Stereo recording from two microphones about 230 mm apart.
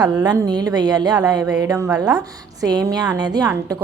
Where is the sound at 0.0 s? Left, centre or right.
Centre.